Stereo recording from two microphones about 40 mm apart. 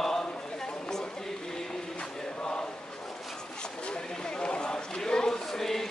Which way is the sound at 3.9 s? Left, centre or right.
Left.